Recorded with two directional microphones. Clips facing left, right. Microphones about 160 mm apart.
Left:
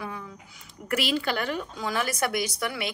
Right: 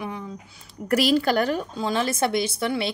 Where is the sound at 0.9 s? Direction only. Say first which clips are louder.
Right 7 dB; 40° right (ahead or behind).